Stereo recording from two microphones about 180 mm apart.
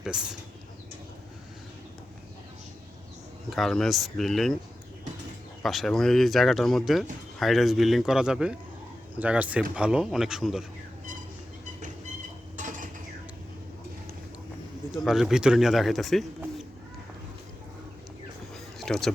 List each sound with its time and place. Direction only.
0.0 s speech: 5° right (ahead or behind)
3.5 s speech: centre (ahead or behind)
5.6 s speech: centre (ahead or behind)
12.5 s cutlery: 45° right (ahead or behind)
14.9 s speech: centre (ahead or behind)
18.5 s a sound: centre (ahead or behind)